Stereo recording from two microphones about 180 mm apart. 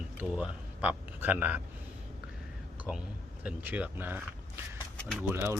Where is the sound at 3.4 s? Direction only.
10° right (ahead or behind).